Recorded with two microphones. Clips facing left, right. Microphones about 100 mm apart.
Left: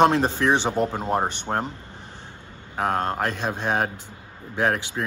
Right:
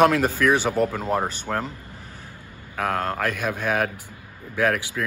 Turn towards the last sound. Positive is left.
turn(degrees=25)  # may be behind; listen again after turning